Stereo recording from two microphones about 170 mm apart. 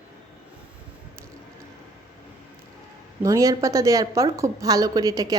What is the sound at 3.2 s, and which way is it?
A woman's voice, 20° right (ahead or behind).